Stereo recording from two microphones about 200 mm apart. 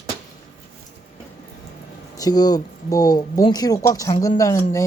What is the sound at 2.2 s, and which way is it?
Speech, 20° left (ahead or behind).